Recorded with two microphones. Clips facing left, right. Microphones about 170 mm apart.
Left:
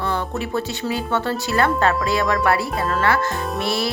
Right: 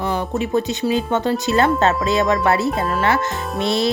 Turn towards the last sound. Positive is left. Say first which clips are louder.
# right 3 dB
turn(degrees=-20)  # may be behind; listen again after turning